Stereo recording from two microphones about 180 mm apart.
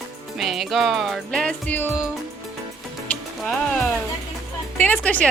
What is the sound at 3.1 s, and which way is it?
Music, 5° left (ahead or behind).